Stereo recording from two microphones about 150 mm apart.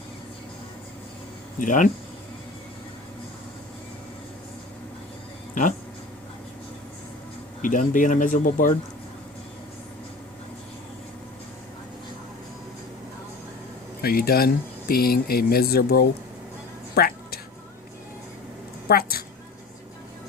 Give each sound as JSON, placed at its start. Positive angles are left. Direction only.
{"t": 1.5, "sound": "speech", "side_deg": 60}
{"t": 7.6, "sound": "speech", "side_deg": 60}
{"t": 14.0, "sound": "speech", "side_deg": 90}
{"t": 16.9, "sound": "a sound", "side_deg": 90}
{"t": 18.9, "sound": "speech", "side_deg": 90}